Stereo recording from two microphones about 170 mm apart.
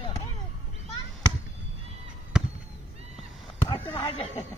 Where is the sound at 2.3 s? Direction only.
5° right (ahead or behind).